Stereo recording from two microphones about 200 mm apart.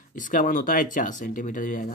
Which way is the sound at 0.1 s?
40° left (ahead or behind).